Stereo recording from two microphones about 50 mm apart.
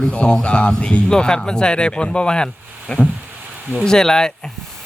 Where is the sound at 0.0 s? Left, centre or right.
Centre.